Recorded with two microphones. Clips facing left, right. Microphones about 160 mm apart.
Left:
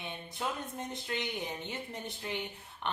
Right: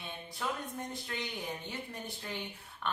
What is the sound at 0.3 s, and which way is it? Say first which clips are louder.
Speech: even; 20° left (ahead or behind).